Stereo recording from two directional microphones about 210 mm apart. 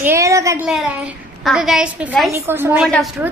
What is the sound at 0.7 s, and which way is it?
A woman's voice, centre (ahead or behind).